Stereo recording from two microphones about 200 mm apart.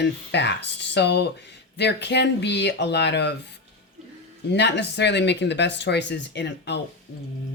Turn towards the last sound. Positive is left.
turn(degrees=60)  # may be behind; listen again after turning